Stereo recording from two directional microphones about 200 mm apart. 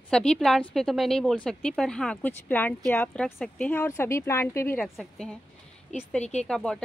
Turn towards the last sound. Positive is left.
turn(degrees=5)  # may be behind; listen again after turning